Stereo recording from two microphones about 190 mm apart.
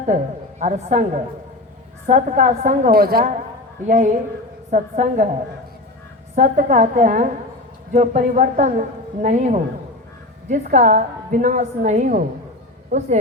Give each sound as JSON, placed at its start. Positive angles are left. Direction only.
{"t": 0.6, "sound": "a woman's voice", "side_deg": -40}
{"t": 3.8, "sound": "a woman's voice", "side_deg": -40}
{"t": 6.3, "sound": "a woman's voice", "side_deg": -40}